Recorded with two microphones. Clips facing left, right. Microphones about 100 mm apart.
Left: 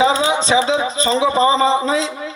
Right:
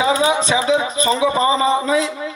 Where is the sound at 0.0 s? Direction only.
25° left (ahead or behind).